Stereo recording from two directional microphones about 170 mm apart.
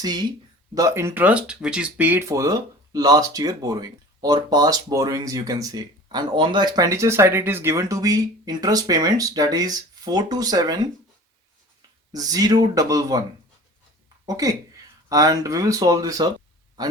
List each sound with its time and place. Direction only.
0.0 s speech: 25° right (ahead or behind)
12.1 s speech: 20° right (ahead or behind)
14.3 s speech: 20° right (ahead or behind)